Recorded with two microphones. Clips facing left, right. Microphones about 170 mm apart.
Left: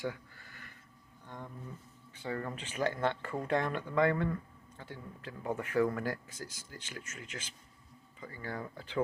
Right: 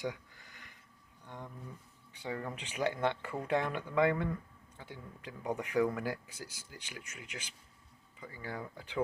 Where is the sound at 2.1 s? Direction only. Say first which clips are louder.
Left 1 dB; 15° right (ahead or behind).